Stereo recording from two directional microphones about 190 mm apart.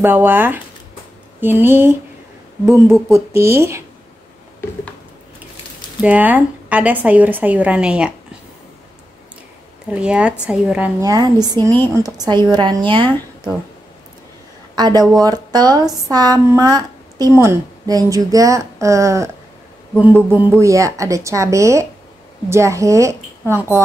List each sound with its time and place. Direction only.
0.0 s a woman's voice: 10° right (ahead or behind)
6.0 s a woman's voice: 10° right (ahead or behind)
9.8 s speech: 5° right (ahead or behind)
11.0 s speech: 20° right (ahead or behind)
14.8 s a woman's voice: 20° right (ahead or behind)